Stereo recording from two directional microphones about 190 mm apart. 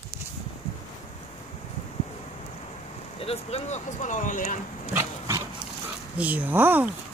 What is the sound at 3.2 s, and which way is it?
Speech, 30° left (ahead or behind).